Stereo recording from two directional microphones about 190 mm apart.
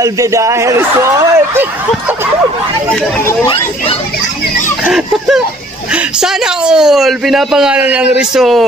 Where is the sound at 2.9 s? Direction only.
15° left (ahead or behind).